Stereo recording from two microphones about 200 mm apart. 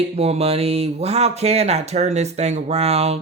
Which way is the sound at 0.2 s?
30° right (ahead or behind).